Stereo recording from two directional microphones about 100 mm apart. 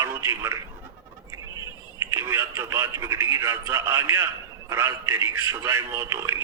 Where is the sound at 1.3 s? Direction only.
35° right (ahead or behind).